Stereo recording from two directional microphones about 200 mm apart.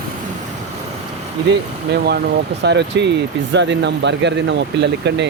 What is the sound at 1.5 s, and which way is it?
Speech, 55° right (ahead or behind).